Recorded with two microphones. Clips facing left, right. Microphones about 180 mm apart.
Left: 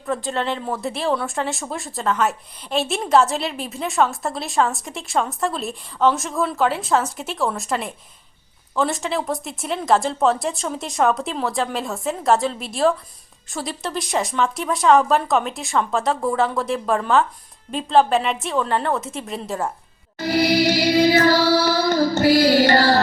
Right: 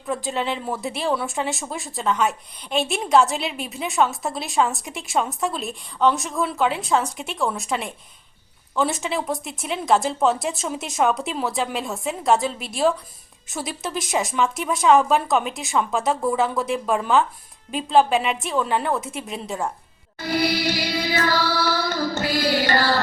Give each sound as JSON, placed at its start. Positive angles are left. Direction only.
{"t": 0.0, "sound": "speech", "side_deg": 0}
{"t": 20.1, "sound": "music", "side_deg": 45}